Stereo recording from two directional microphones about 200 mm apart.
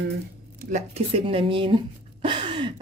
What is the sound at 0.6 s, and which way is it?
A woman's voice, 35° right (ahead or behind).